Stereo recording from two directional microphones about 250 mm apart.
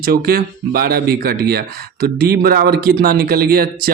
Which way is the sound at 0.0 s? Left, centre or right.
Right.